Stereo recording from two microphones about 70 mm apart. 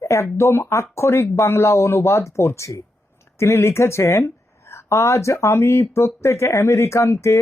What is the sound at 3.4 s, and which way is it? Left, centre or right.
Speech, left.